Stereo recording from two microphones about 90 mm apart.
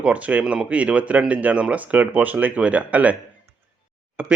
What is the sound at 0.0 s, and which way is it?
Speech, 15° right (ahead or behind).